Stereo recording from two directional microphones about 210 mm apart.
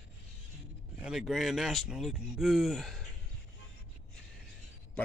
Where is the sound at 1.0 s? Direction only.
Centre (ahead or behind).